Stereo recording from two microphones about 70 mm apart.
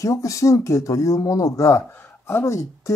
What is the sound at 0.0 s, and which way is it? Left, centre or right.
Speech, left.